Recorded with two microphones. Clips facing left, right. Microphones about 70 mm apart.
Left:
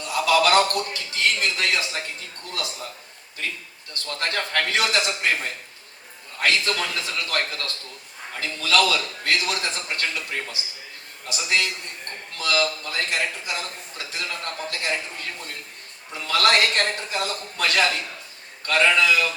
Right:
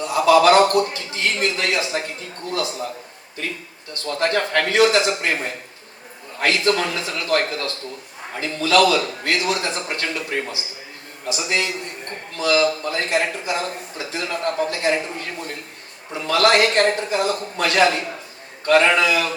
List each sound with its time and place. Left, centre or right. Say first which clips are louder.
0.0 s a man's voice: right 6 dB; right
4.2 s a man's voice: right 6 dB; right
6.4 s a man's voice: right 4 dB; right